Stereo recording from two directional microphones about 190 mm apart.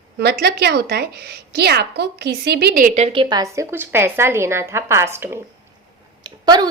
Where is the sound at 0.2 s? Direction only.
60° right (ahead or behind); by 5.3 s 15° right (ahead or behind).